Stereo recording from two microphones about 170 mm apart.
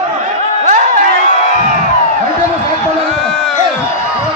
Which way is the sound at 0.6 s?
45° right (ahead or behind).